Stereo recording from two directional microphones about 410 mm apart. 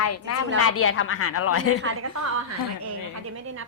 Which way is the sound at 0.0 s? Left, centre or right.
Left.